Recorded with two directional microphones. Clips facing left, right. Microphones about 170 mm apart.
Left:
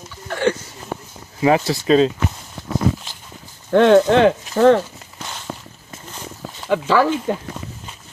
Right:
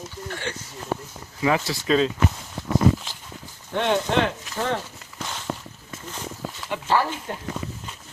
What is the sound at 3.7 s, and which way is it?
Speech, 90° left.